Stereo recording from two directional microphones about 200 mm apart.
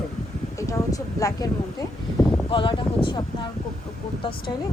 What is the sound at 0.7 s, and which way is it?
Speech, 15° left (ahead or behind).